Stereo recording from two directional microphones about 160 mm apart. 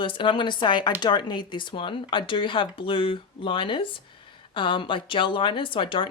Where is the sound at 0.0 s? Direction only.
30° left (ahead or behind).